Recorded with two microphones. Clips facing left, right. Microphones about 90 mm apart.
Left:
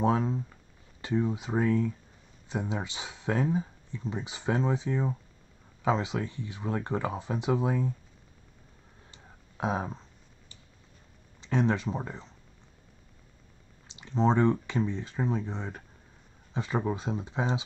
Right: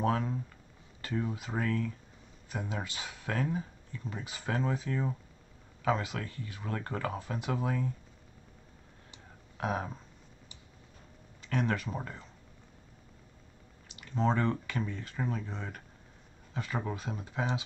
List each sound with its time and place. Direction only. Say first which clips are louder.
0.0 s speech: left 4 dB; 20° left (ahead or behind)
9.6 s speech: left 3 dB; 20° left (ahead or behind)
11.4 s speech: left 5 dB; 25° left (ahead or behind)
13.9 s speech: left 5 dB; 25° left (ahead or behind)